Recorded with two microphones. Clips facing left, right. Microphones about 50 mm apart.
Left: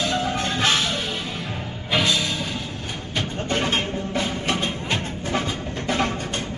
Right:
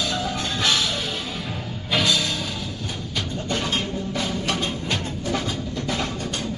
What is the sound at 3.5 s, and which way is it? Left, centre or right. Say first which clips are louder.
Music: left 2 dB; left.